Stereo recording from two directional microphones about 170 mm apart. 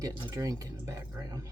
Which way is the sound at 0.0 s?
25° right (ahead or behind).